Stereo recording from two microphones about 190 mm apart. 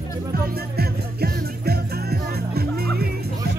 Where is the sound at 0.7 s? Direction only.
55° right (ahead or behind).